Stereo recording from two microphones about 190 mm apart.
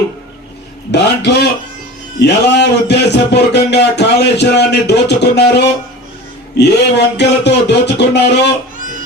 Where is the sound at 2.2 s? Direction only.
60° left (ahead or behind).